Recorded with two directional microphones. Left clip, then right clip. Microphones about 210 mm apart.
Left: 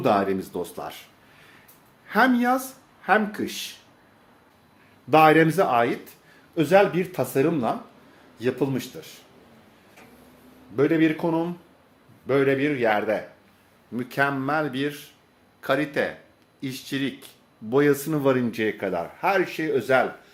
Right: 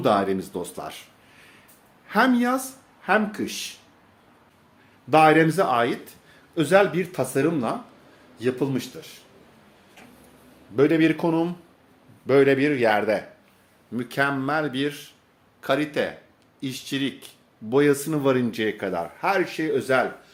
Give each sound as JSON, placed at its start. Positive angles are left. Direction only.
{"t": 0.0, "sound": "speech", "side_deg": -10}
{"t": 5.0, "sound": "speech", "side_deg": 0}
{"t": 10.8, "sound": "speech", "side_deg": -25}
{"t": 13.9, "sound": "speech", "side_deg": -15}